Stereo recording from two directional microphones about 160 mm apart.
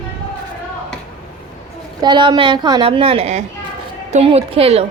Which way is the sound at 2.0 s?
30° right (ahead or behind).